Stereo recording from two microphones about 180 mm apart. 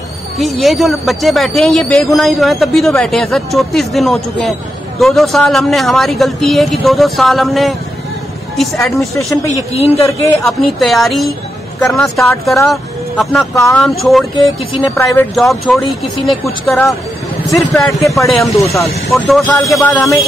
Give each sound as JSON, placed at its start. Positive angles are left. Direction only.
{"t": 0.4, "sound": "speech", "side_deg": 0}
{"t": 9.5, "sound": "a man's voice", "side_deg": 35}
{"t": 10.4, "sound": "speech", "side_deg": 0}
{"t": 13.6, "sound": "speech", "side_deg": 15}
{"t": 13.8, "sound": "speech", "side_deg": 0}
{"t": 15.0, "sound": "speech", "side_deg": 15}
{"t": 15.3, "sound": "speech", "side_deg": 0}
{"t": 18.7, "sound": "speech", "side_deg": 15}
{"t": 19.1, "sound": "speech", "side_deg": 0}